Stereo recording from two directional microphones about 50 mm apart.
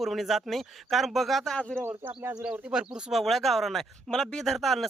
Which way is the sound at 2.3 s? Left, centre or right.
Centre.